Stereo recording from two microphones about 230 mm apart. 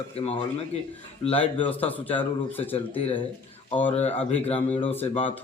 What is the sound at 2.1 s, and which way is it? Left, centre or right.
Speech, centre.